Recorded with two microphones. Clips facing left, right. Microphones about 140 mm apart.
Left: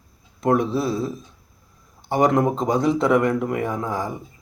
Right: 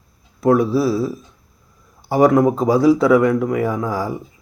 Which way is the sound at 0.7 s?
5° right (ahead or behind).